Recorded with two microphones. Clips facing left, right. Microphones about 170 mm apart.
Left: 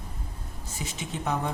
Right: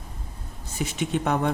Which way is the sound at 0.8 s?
65° right (ahead or behind).